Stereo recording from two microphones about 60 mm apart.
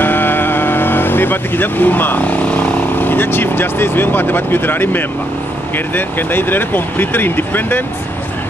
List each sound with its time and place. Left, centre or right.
0.0 s vehicle: left
5.9 s speech: left